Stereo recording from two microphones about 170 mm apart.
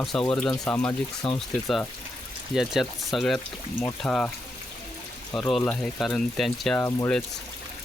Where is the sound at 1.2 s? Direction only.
35° left (ahead or behind).